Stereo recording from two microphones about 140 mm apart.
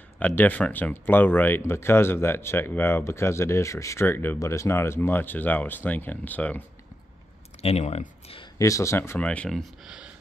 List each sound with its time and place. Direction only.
0.4 s speech: 10° left (ahead or behind)
7.6 s speech: 50° left (ahead or behind)
8.5 s speech: 20° left (ahead or behind); by 10.1 s 5° right (ahead or behind)